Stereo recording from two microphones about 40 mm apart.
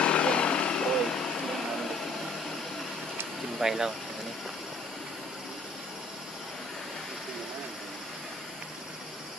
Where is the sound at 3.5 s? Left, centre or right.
Centre.